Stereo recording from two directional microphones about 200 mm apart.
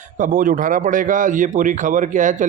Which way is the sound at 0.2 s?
45° right (ahead or behind).